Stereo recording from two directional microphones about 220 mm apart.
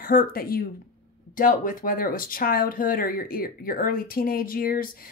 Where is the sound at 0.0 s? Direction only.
40° left (ahead or behind).